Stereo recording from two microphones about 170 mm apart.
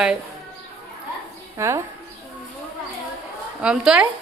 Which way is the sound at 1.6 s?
15° right (ahead or behind).